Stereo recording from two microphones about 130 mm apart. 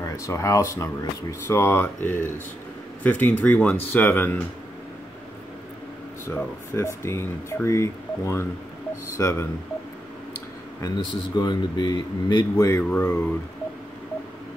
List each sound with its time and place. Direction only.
0.0 s speech: 25° left (ahead or behind)
6.2 s speech: 20° left (ahead or behind)
10.8 s speech: 35° left (ahead or behind)
12.5 s speech: 20° left (ahead or behind)